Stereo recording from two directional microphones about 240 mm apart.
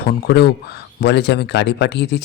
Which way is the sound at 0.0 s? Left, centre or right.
Left.